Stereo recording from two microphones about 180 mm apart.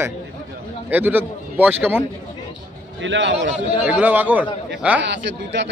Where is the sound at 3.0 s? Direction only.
90° right.